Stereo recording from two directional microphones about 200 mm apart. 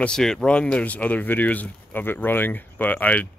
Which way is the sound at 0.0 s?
5° left (ahead or behind).